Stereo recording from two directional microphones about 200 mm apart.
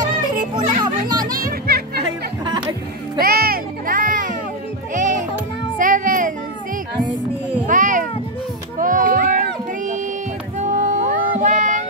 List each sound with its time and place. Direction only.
0.7 s children playing: 20° right (ahead or behind)
3.2 s music: 50° right (ahead or behind)
7.6 s a sound: 40° right (ahead or behind)
10.6 s music: 35° right (ahead or behind)